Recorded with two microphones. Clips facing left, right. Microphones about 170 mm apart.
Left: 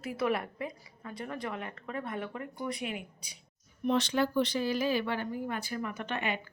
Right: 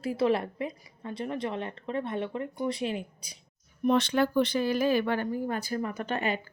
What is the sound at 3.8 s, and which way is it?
A woman's voice, 55° right (ahead or behind).